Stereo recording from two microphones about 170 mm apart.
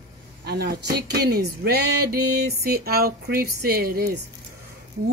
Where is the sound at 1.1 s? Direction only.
70° right (ahead or behind).